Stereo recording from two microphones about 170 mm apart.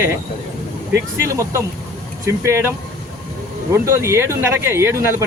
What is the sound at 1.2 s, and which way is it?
Speech, 15° right (ahead or behind).